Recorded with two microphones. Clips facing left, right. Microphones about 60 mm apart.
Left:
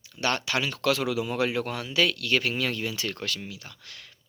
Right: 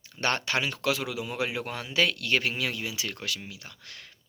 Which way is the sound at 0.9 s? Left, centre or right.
Centre.